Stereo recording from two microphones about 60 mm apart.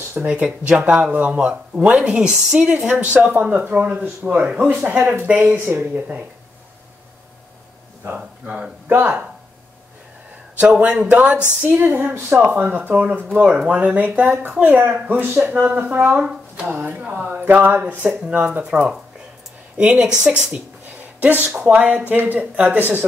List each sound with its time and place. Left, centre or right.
0.2 s speech: centre
2.9 s speech: right
8.5 s speech: right
8.8 s speech: right
10.7 s speech: right
11.6 s speech: right
16.2 s a sound: centre
16.6 s speech: right
18.2 s speech: right
21.2 s speech: right